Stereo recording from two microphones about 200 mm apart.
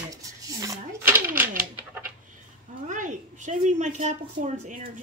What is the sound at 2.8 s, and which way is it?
A woman's voice, 40° right (ahead or behind).